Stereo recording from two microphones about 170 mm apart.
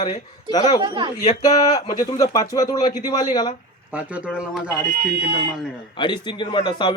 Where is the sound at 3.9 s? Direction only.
10° right (ahead or behind).